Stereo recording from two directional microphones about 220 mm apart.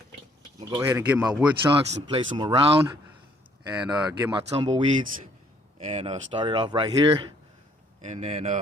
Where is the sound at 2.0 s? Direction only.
20° right (ahead or behind).